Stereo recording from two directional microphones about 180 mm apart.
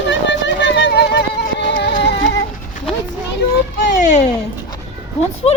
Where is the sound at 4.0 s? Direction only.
40° left (ahead or behind).